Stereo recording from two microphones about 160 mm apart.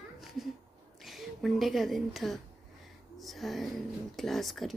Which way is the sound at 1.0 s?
Centre (ahead or behind).